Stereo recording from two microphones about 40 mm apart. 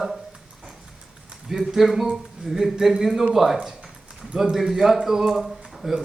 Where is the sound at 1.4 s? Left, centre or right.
Centre.